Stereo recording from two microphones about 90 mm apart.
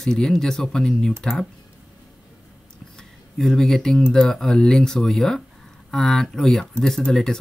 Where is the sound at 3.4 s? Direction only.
5° left (ahead or behind).